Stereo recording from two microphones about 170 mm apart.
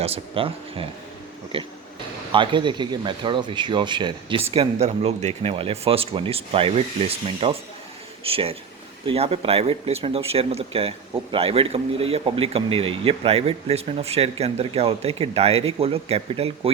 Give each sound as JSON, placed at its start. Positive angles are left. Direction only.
{"t": 0.0, "sound": "a man's voice", "side_deg": -35}